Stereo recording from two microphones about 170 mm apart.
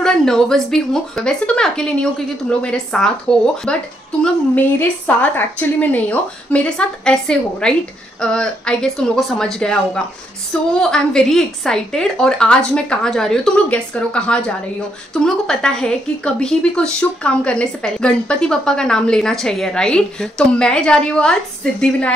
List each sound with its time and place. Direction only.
0.0 s a woman's voice: 5° left (ahead or behind)